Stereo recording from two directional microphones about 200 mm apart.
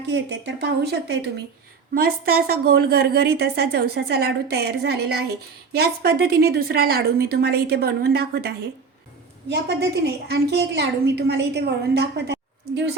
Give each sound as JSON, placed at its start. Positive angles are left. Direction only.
{"t": 0.1, "sound": "a woman's voice", "side_deg": -60}